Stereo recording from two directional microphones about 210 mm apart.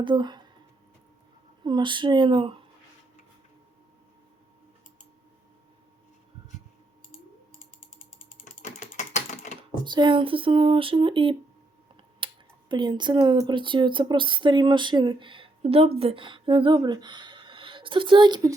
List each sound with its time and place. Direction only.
0.0 s speech: 20° right (ahead or behind)
1.6 s speech: 20° right (ahead or behind)
8.6 s typing: 35° left (ahead or behind)
9.8 s speech: 20° right (ahead or behind)